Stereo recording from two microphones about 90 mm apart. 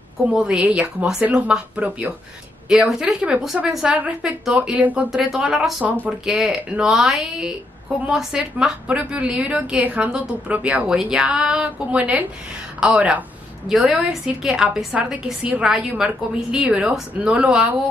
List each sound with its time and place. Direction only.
0.3 s a woman's voice: 10° right (ahead or behind)